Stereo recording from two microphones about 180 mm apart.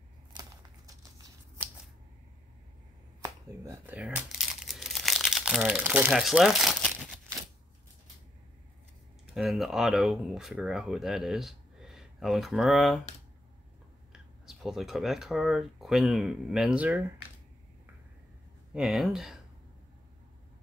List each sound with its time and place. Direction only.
0.3 s a sound: 20° right (ahead or behind)
3.2 s crumpling: 15° right (ahead or behind); by 7.2 s centre (ahead or behind)
9.3 s speech: centre (ahead or behind)
14.1 s speech: centre (ahead or behind)
18.7 s speech: centre (ahead or behind)